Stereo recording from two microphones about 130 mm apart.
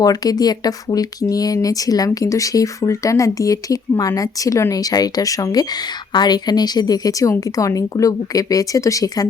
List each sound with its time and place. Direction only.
0.0 s speech: 30° left (ahead or behind)